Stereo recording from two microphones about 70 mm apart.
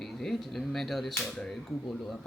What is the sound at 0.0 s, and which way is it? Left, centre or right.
Speech, centre.